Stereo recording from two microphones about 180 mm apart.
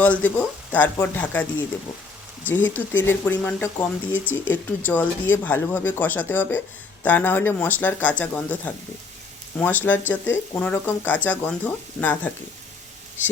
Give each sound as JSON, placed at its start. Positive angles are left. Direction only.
{"t": 0.0, "sound": "speech", "side_deg": 10}